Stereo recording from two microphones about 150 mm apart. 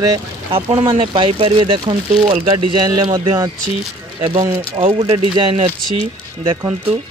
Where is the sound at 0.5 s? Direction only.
40° right (ahead or behind).